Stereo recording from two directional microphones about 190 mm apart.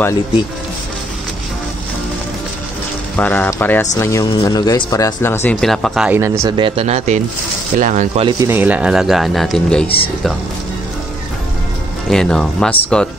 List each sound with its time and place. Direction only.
3.2 s speech: 10° left (ahead or behind)
6.0 s speech: 15° right (ahead or behind)
6.5 s speech: 30° right (ahead or behind)
8.3 s speech: 15° right (ahead or behind); by 9.8 s 5° left (ahead or behind)
12.1 s speech: 5° left (ahead or behind)